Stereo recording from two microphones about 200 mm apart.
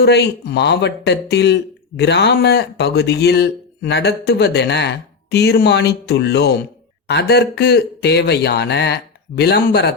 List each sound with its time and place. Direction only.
0.0 s speech: 55° left (ahead or behind)